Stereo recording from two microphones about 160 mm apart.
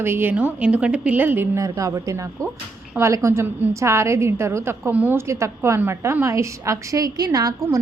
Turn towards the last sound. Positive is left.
turn(degrees=-20)  # may be behind; listen again after turning